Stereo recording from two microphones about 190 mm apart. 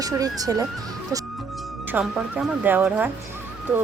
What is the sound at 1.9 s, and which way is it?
Speech, 10° right (ahead or behind).